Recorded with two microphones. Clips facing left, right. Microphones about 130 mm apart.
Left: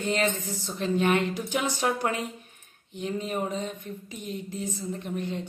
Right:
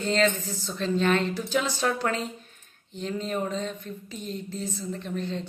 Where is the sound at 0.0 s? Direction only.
15° left (ahead or behind).